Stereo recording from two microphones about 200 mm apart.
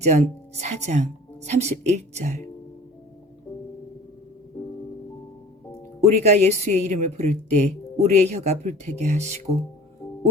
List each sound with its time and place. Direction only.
0.0 s speech: 35° right (ahead or behind)
6.1 s speech: 35° right (ahead or behind)